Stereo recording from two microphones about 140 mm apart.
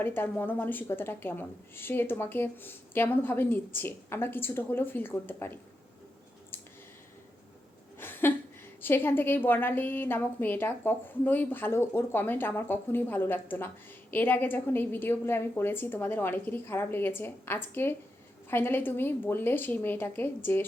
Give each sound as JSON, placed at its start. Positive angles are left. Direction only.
{"t": 0.0, "sound": "speech", "side_deg": 15}
{"t": 7.9, "sound": "a sound", "side_deg": 15}
{"t": 8.8, "sound": "speech", "side_deg": 15}